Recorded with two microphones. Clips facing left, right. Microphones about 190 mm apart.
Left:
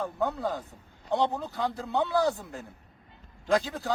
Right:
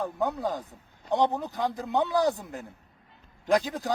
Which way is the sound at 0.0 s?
15° right (ahead or behind).